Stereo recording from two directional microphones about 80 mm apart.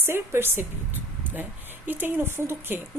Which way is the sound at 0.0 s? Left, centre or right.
Right.